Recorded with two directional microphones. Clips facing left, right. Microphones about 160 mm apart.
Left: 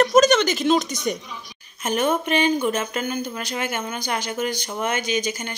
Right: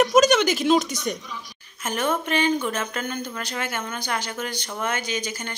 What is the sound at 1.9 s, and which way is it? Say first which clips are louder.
Speech: left 3 dB; 20° left (ahead or behind).